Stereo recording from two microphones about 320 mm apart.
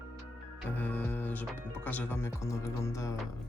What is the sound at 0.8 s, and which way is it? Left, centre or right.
Speech, centre.